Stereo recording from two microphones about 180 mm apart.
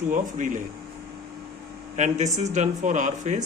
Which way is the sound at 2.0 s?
40° right (ahead or behind).